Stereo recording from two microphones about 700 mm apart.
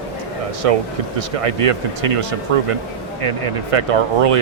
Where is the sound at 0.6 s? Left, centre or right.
Right.